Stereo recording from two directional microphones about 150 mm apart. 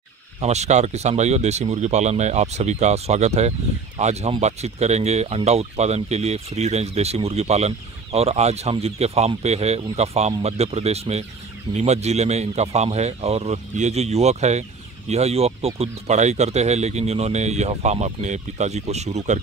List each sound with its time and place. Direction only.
0.4 s speech: 45° right (ahead or behind)